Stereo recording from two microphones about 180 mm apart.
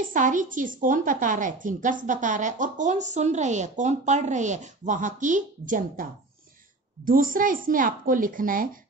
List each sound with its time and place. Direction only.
0.0 s a woman's voice: 45° right (ahead or behind)
7.1 s a woman's voice: 50° right (ahead or behind)